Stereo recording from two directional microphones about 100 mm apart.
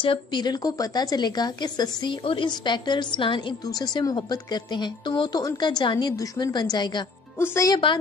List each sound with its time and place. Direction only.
0.0 s speech: 55° left (ahead or behind)
3.6 s speech: 40° left (ahead or behind)
7.3 s speech: 25° left (ahead or behind)